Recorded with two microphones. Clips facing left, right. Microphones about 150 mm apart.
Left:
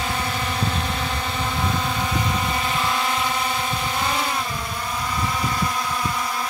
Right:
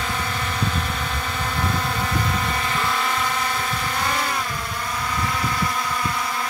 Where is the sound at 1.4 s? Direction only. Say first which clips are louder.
Even; 10° left (ahead or behind).